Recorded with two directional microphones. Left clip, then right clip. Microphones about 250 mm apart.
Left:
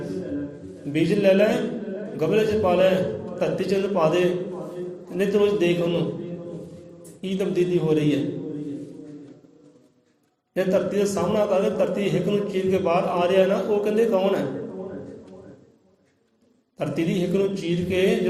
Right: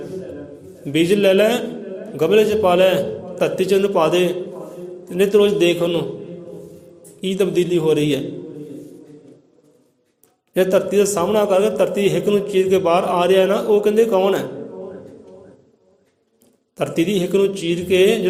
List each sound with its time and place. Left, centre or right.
0.9 s a man's voice: right
7.2 s a man's voice: right
10.5 s a man's voice: right
16.7 s a man's voice: right